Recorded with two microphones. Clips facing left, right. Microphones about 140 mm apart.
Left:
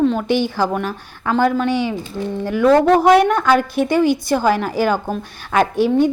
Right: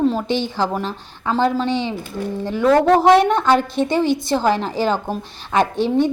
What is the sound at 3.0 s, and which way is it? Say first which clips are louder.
Speech: left 1 dB; 25° right (ahead or behind).